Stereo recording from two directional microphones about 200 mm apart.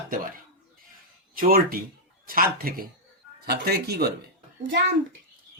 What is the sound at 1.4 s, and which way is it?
Speech, 45° right (ahead or behind).